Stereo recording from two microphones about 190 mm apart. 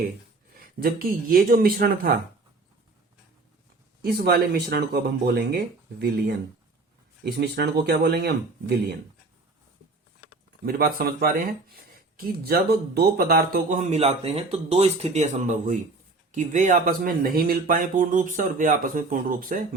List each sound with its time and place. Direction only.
0.5 s speech: 50° right (ahead or behind)
4.0 s speech: 55° right (ahead or behind)
10.7 s speech: 50° right (ahead or behind)